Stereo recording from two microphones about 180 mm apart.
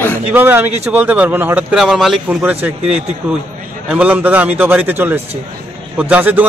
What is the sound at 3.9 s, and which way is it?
A man's voice, 10° right (ahead or behind).